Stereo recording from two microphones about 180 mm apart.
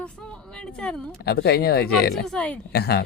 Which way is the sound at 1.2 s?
65° left (ahead or behind).